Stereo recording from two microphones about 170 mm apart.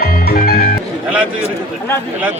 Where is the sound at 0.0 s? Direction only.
60° left (ahead or behind).